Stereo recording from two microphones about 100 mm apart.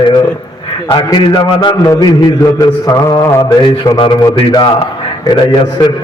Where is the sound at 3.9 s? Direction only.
60° left (ahead or behind).